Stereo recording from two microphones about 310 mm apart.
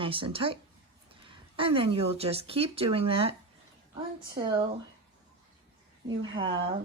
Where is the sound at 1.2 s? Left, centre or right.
Centre.